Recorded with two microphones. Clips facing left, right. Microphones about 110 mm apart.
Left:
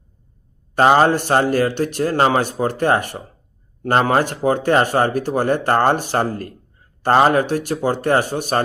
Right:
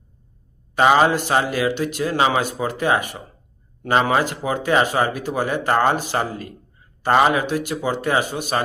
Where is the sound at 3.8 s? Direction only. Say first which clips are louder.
Left 2 dB; 50° left (ahead or behind).